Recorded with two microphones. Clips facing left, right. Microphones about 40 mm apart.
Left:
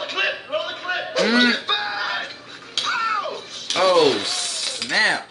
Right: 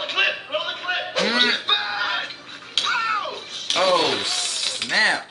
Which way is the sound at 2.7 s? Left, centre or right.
Right.